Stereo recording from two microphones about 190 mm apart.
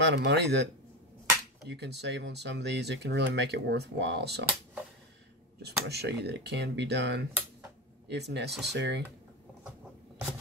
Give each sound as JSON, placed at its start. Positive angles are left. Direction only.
{"t": 0.0, "sound": "speech", "side_deg": -60}
{"t": 1.7, "sound": "speech", "side_deg": -60}
{"t": 5.6, "sound": "speech", "side_deg": -60}